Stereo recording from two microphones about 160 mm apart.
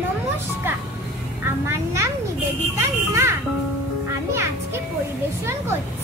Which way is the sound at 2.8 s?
15° right (ahead or behind).